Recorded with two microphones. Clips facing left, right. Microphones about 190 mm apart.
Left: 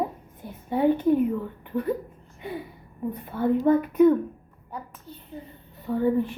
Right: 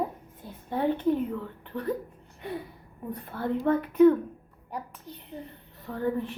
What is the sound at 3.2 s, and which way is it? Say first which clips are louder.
Speech: left 6 dB; 5° left (ahead or behind).